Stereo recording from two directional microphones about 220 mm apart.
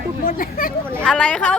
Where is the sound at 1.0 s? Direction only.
5° left (ahead or behind).